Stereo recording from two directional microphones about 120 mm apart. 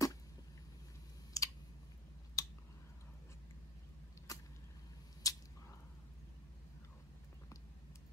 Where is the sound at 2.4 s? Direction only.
30° left (ahead or behind).